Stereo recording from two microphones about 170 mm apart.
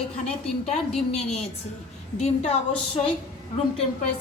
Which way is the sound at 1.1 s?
40° left (ahead or behind).